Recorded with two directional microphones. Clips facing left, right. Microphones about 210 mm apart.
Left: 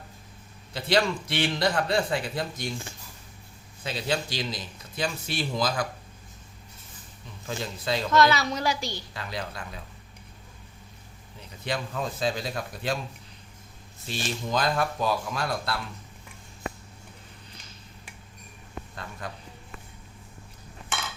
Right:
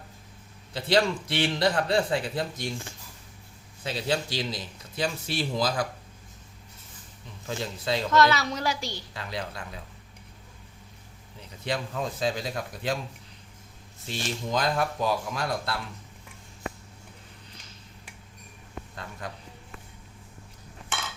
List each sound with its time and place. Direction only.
0.7 s speech: 30° right (ahead or behind)
3.8 s speech: 35° right (ahead or behind)
7.6 s a woman's voice: 25° right (ahead or behind)
8.1 s a woman's voice: 15° left (ahead or behind)
9.1 s a woman's voice: 25° right (ahead or behind)
11.6 s speech: 25° right (ahead or behind)
14.3 s speech: 15° right (ahead or behind)
19.2 s speech: 15° right (ahead or behind)